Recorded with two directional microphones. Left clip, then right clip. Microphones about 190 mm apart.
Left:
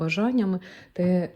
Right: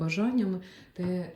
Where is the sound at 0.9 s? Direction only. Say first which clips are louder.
Left 9 dB; 15° left (ahead or behind).